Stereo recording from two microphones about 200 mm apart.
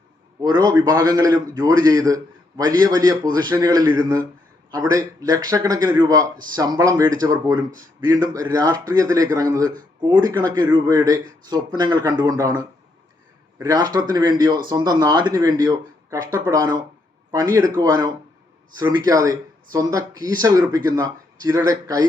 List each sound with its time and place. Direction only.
0.4 s a man's voice: 20° right (ahead or behind)